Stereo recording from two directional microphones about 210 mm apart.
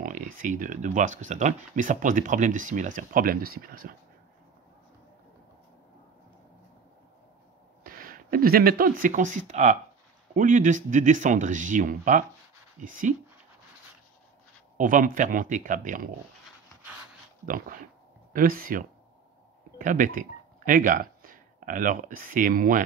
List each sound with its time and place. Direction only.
0.0 s speech: 40° right (ahead or behind)
7.8 s speech: 45° right (ahead or behind)
14.8 s speech: 40° right (ahead or behind)
17.5 s speech: 40° right (ahead or behind)